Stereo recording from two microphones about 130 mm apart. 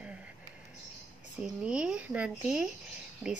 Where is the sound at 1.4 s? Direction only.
5° right (ahead or behind).